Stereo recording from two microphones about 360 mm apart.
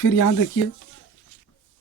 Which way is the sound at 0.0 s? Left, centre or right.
Left.